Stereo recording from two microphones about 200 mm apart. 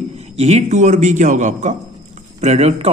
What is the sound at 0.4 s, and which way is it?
A man's voice, 30° right (ahead or behind).